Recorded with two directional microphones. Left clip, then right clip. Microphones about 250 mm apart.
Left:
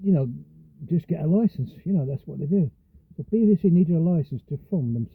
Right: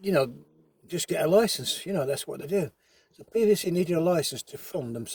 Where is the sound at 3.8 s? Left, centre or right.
Right.